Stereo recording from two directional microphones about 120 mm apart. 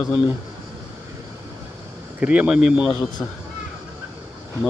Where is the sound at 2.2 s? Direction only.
10° right (ahead or behind).